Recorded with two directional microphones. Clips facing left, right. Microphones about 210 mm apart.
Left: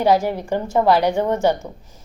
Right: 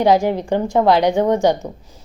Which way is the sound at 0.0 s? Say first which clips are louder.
Right 3 dB; 15° right (ahead or behind).